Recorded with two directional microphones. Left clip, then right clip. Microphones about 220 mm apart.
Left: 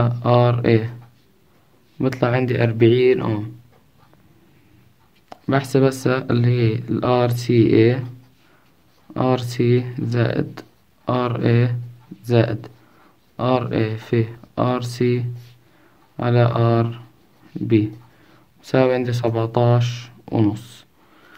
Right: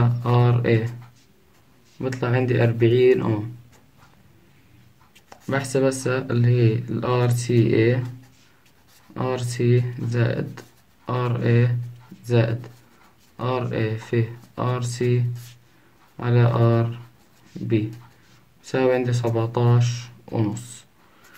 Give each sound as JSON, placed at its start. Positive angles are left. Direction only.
{"t": 0.0, "sound": "a sound", "side_deg": 40}
{"t": 2.0, "sound": "speech", "side_deg": 45}
{"t": 5.3, "sound": "speech", "side_deg": 40}
{"t": 9.1, "sound": "speech", "side_deg": 40}
{"t": 18.6, "sound": "speech", "side_deg": 45}